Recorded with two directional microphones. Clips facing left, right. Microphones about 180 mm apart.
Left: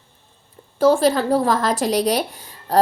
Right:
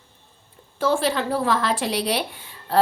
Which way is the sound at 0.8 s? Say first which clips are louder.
Left 6 dB; 40° left (ahead or behind).